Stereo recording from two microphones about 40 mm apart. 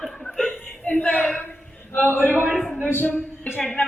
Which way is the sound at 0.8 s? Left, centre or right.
Left.